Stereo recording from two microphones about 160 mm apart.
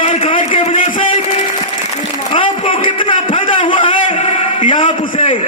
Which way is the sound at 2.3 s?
30° left (ahead or behind).